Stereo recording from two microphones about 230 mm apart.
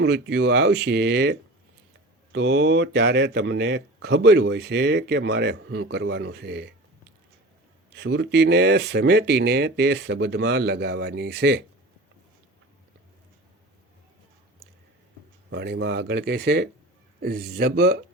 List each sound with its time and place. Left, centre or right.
0.0 s speech: right
7.9 s speech: right
15.4 s speech: right